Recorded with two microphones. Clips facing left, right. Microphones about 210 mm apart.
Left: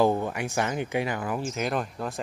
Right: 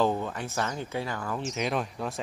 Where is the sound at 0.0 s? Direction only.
15° left (ahead or behind).